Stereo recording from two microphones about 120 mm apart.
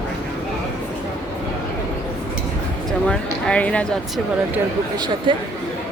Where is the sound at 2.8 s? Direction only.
5° left (ahead or behind).